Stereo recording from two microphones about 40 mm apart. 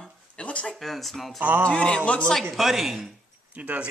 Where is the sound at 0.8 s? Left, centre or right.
Centre.